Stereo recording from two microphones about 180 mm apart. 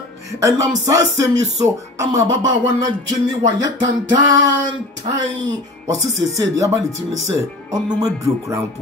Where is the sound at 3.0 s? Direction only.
20° right (ahead or behind).